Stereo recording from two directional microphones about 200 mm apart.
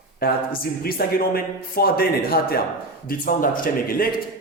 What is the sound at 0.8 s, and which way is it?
Speech, 50° left (ahead or behind).